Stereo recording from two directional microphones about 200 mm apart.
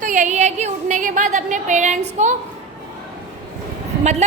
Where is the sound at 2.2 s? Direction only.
35° right (ahead or behind).